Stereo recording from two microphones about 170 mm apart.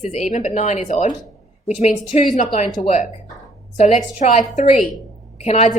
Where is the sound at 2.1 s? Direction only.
40° left (ahead or behind).